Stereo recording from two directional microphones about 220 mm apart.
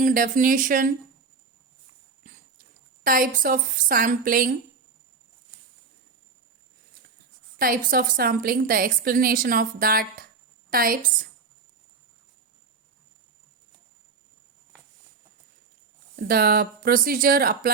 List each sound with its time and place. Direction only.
0.0 s a woman's voice: 40° right (ahead or behind)
3.0 s a woman's voice: 40° right (ahead or behind)
7.6 s a woman's voice: 40° right (ahead or behind)
16.1 s speech: 45° right (ahead or behind)